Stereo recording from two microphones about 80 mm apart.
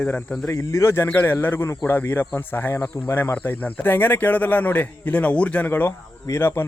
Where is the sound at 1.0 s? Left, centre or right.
Left.